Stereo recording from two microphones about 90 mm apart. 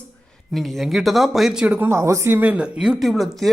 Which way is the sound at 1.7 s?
30° right (ahead or behind).